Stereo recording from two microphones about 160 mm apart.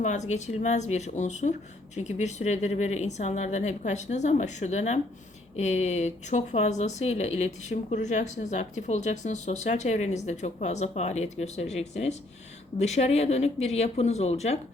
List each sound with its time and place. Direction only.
0.0 s speech: 50° left (ahead or behind)